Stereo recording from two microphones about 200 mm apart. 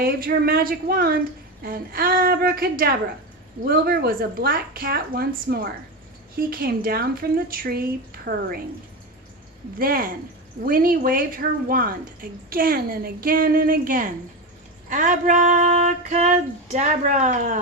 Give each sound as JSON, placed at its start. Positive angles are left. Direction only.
{"t": 0.0, "sound": "speech", "side_deg": -45}
{"t": 9.7, "sound": "speech", "side_deg": -45}
{"t": 14.8, "sound": "a sound", "side_deg": -40}